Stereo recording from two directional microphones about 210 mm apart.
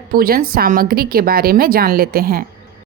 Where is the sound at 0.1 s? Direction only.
45° right (ahead or behind).